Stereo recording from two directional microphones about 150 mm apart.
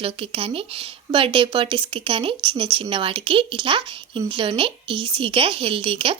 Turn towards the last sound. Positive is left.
turn(degrees=-40)  # may be behind; listen again after turning